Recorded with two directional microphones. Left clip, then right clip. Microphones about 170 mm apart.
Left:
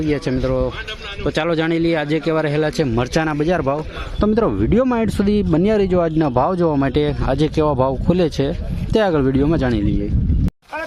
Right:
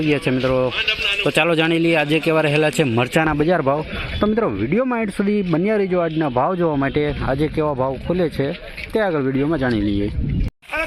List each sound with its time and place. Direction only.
0.1 s a man's voice: 15° left (ahead or behind)
4.2 s speech: 25° left (ahead or behind)